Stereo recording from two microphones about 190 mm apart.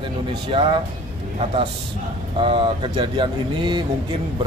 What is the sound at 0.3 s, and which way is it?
Speech, 25° right (ahead or behind).